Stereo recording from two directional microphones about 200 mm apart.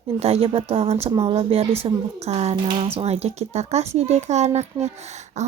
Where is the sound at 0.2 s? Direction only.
30° right (ahead or behind).